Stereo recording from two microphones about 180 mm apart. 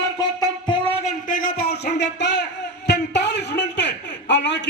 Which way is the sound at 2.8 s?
70° left (ahead or behind).